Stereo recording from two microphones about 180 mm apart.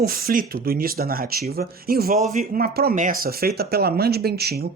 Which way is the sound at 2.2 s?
40° right (ahead or behind).